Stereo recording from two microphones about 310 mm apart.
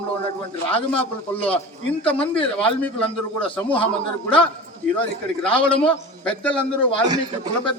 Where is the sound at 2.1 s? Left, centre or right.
Centre.